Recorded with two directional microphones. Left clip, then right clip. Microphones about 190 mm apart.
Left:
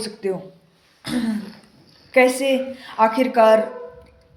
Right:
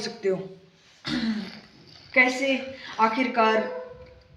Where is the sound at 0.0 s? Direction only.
30° left (ahead or behind).